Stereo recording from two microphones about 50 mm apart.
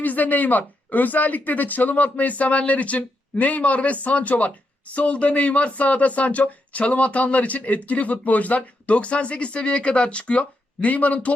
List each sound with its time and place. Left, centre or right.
0.0 s speech: left